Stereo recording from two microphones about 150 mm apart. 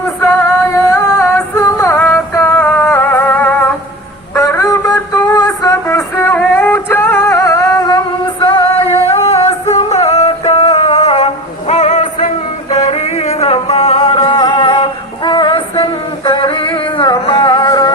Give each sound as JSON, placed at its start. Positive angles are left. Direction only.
{"t": 0.2, "sound": "music", "side_deg": 10}
{"t": 4.4, "sound": "a sound", "side_deg": 20}
{"t": 9.5, "sound": "music", "side_deg": 45}